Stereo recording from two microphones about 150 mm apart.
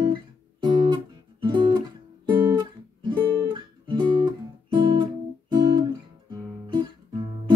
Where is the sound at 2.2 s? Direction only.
30° right (ahead or behind).